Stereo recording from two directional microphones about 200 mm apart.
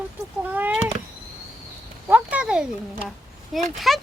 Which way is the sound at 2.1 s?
5° right (ahead or behind).